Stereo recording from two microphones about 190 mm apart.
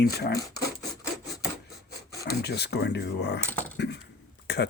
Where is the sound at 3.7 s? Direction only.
60° left (ahead or behind).